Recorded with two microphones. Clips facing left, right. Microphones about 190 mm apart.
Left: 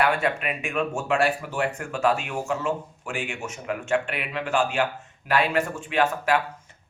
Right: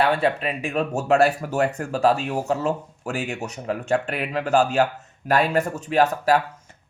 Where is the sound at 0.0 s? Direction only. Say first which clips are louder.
Right 3 dB; 30° right (ahead or behind).